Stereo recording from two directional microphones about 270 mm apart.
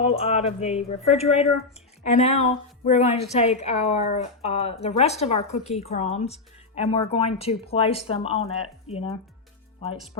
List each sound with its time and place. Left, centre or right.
0.0 s a woman's voice: left